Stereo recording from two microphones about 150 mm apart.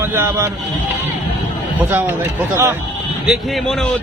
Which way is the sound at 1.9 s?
15° right (ahead or behind).